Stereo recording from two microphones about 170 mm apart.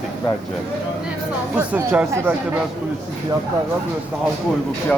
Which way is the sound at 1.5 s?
10° right (ahead or behind).